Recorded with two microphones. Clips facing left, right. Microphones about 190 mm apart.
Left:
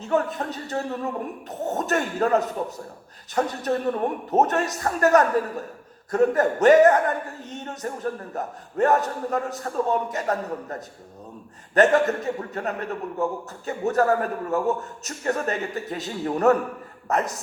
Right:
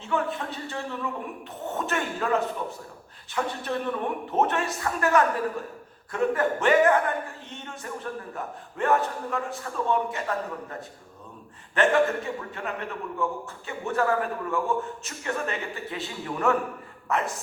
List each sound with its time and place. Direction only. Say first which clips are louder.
0.0 s speech: left 4 dB; 40° left (ahead or behind)